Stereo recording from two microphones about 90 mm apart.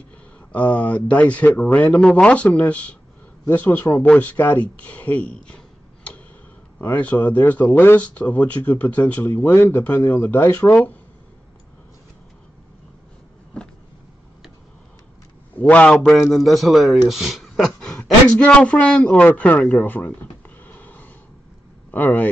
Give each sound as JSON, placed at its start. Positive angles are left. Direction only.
{"t": 0.5, "sound": "speech", "side_deg": 15}
{"t": 2.0, "sound": "speech", "side_deg": 5}
{"t": 6.8, "sound": "speech", "side_deg": 20}
{"t": 15.8, "sound": "speech", "side_deg": 10}
{"t": 19.8, "sound": "a sound", "side_deg": 20}
{"t": 21.9, "sound": "speech", "side_deg": 20}